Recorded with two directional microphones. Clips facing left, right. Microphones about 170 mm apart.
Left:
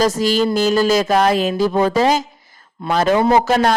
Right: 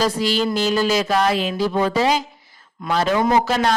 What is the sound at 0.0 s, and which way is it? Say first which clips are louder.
Speech: left 4 dB; 45° left (ahead or behind).